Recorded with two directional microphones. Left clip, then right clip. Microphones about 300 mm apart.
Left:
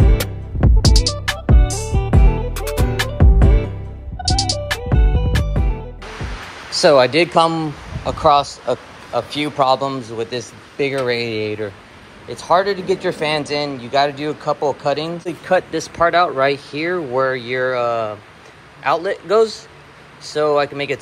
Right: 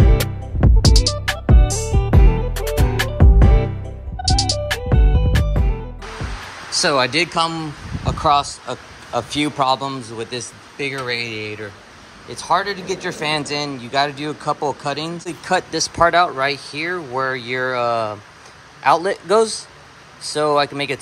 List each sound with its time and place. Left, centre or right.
0.2 s music: centre
6.8 s speech: centre
12.7 s speech: right
13.0 s speech: centre